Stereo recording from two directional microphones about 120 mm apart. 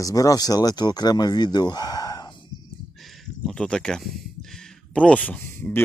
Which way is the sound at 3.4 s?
5° left (ahead or behind).